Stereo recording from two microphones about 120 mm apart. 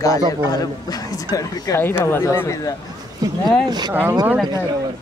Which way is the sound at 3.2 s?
35° right (ahead or behind).